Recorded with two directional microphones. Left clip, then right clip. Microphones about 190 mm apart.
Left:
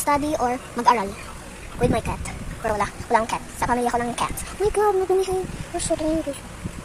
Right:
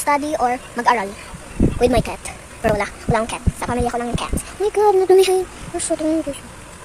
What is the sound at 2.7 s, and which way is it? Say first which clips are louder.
A woman's voice: right 1 dB; 15° right (ahead or behind).